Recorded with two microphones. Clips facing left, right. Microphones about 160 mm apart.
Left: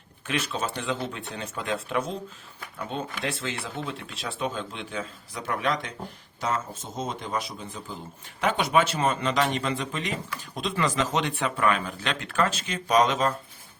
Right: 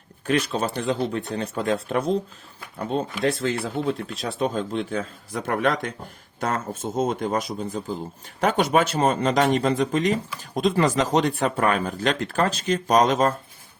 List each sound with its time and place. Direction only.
0.3 s speech: 40° right (ahead or behind)